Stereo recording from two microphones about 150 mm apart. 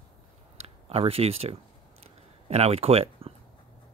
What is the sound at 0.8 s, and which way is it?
Speech, 40° right (ahead or behind).